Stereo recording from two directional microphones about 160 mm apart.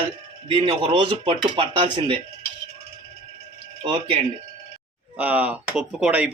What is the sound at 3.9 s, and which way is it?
Speech, 35° right (ahead or behind).